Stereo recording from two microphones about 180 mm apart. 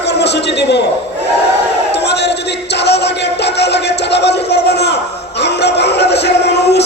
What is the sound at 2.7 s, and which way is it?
Music, 70° left (ahead or behind).